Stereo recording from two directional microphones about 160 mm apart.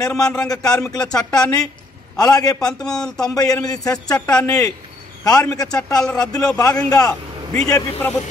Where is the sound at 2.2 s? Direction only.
25° left (ahead or behind).